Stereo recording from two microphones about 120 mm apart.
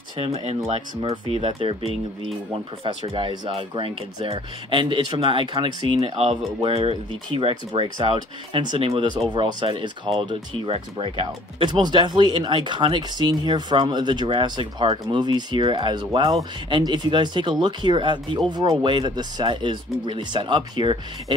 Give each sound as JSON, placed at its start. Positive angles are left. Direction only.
{"t": 0.2, "sound": "speech", "side_deg": -55}
{"t": 5.9, "sound": "speech", "side_deg": -55}